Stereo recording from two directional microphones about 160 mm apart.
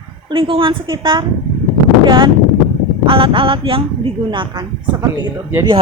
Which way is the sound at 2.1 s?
30° right (ahead or behind).